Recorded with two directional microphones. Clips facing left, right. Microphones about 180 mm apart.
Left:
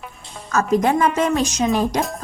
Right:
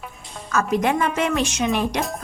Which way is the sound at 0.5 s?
40° left (ahead or behind).